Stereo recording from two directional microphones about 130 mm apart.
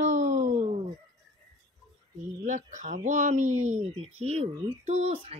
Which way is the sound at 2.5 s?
75° right (ahead or behind).